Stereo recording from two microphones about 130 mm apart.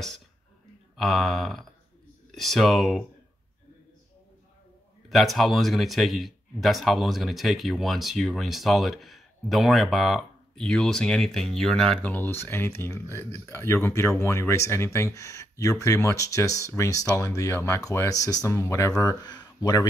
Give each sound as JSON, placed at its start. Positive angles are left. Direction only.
{"t": 0.9, "sound": "speech", "side_deg": 0}
{"t": 5.1, "sound": "speech", "side_deg": 0}